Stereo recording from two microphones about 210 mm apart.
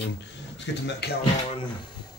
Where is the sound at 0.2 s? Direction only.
55° left (ahead or behind).